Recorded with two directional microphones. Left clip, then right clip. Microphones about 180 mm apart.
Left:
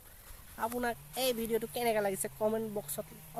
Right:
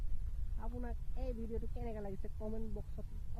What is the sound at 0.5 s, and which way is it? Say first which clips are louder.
Speech: left 15 dB; 15° left (ahead or behind).